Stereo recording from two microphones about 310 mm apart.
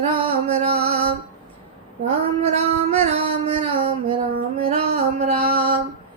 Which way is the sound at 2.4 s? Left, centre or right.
Centre.